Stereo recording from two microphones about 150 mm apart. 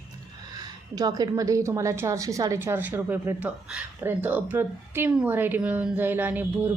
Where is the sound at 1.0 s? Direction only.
25° right (ahead or behind).